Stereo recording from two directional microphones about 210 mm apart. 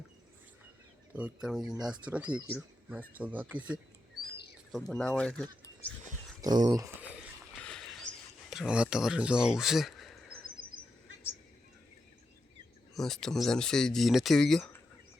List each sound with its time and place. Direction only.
1.1 s speech: 5° right (ahead or behind)
4.9 s speech: 5° left (ahead or behind)
6.4 s speech: 20° right (ahead or behind)
7.6 s a sound: 5° left (ahead or behind)
8.4 s speech: 5° right (ahead or behind)
10.6 s a sound: 45° right (ahead or behind)
12.9 s speech: centre (ahead or behind)